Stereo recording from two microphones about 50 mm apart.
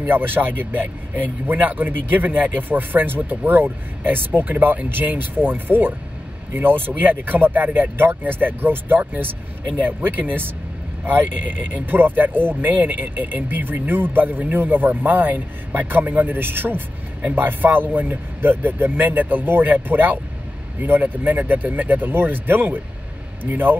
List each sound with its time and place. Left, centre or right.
0.0 s speech: right